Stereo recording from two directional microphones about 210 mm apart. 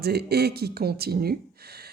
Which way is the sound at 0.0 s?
50° right (ahead or behind).